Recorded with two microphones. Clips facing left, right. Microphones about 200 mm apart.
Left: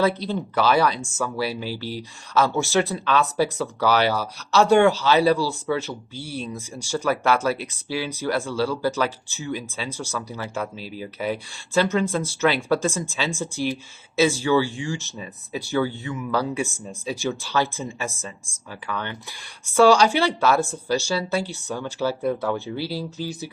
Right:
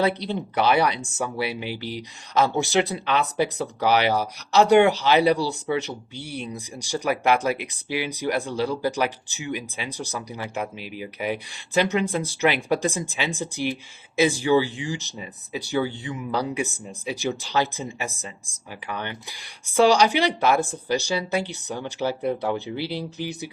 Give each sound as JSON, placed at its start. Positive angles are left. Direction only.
{"t": 0.3, "sound": "speech", "side_deg": -20}